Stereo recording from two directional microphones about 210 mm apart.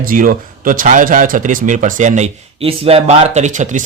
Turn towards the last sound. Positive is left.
turn(degrees=-35)  # may be behind; listen again after turning